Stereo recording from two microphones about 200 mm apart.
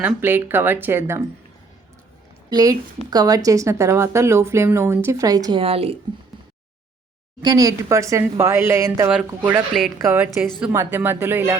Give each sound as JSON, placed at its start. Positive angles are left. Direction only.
{"t": 0.0, "sound": "speech", "side_deg": -10}
{"t": 2.5, "sound": "speech", "side_deg": -20}
{"t": 7.4, "sound": "speech", "side_deg": -15}